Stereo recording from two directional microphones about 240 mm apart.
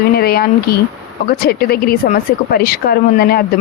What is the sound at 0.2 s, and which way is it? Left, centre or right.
Speech, left.